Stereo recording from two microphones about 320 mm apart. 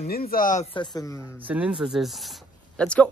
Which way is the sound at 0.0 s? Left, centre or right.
Left.